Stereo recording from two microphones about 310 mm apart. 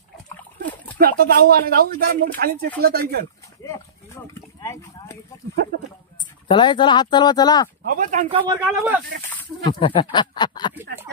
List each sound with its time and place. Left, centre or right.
0.9 s speech: right
3.6 s a sound: centre
6.4 s speech: centre
7.8 s speech: right
8.4 s speech: centre
9.3 s a sound: centre
9.8 s speech: centre
10.7 s speech: centre